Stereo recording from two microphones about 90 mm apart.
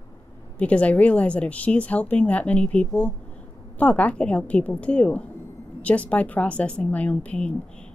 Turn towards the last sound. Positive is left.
turn(degrees=10)  # may be behind; listen again after turning